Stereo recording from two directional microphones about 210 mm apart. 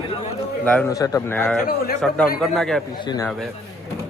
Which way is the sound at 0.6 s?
5° left (ahead or behind).